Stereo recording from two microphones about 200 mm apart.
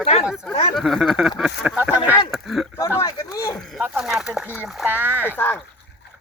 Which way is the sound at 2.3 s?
Centre (ahead or behind).